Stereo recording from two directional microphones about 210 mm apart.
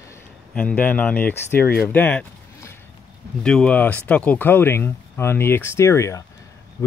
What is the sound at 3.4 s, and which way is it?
Speech, 5° left (ahead or behind).